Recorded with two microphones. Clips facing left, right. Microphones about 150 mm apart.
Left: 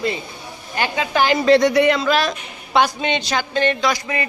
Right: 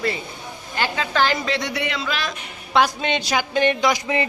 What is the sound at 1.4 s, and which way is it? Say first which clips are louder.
Speech: left 12 dB; 45° left (ahead or behind).